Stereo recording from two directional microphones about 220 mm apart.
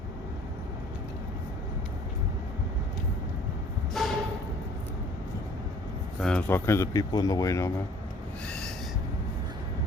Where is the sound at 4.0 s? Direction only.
Centre (ahead or behind).